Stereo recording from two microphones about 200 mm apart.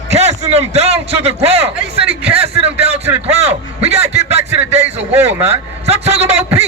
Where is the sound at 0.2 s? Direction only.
35° right (ahead or behind).